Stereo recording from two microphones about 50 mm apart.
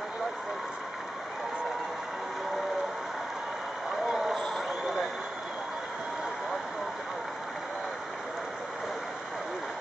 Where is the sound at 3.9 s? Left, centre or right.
Centre.